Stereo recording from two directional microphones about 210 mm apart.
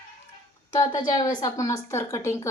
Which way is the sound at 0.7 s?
20° left (ahead or behind).